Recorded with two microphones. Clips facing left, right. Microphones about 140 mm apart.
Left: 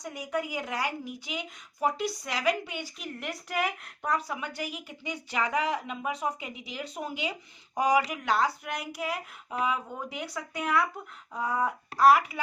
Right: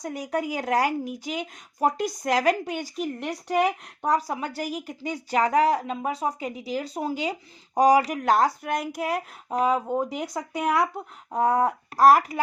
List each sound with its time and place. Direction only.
0.2 s speech: 40° right (ahead or behind)